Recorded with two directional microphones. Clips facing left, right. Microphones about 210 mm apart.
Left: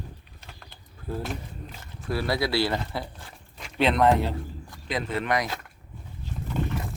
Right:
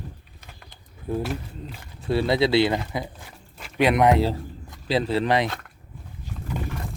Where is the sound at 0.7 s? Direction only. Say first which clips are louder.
Right 6 dB; 15° right (ahead or behind).